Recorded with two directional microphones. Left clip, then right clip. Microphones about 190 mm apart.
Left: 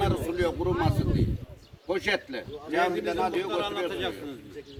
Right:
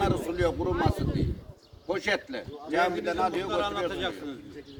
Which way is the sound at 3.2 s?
10° right (ahead or behind).